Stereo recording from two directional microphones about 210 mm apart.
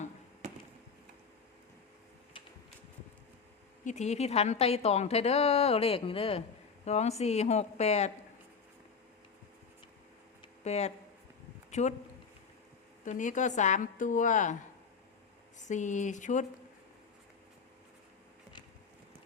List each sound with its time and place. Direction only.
0.4 s a sound: 35° right (ahead or behind)
3.8 s a woman's voice: 35° left (ahead or behind)
10.6 s speech: 30° left (ahead or behind)
13.1 s a woman's voice: 35° left (ahead or behind)
15.5 s a woman's voice: 35° left (ahead or behind)